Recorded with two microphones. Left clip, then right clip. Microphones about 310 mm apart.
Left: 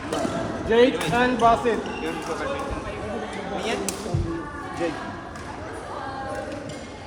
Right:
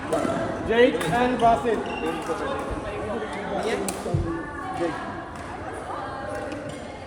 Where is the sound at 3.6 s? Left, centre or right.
Centre.